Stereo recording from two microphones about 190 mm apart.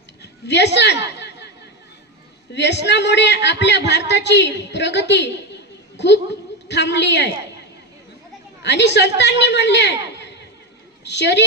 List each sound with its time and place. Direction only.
0.2 s chatter: 65° left (ahead or behind)
2.5 s a man's voice: 65° left (ahead or behind)
6.7 s a man's voice: 65° left (ahead or behind)
8.6 s a man's voice: 65° left (ahead or behind)